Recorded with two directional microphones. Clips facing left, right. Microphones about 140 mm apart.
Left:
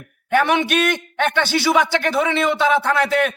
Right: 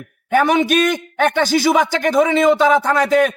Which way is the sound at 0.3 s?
40° right (ahead or behind).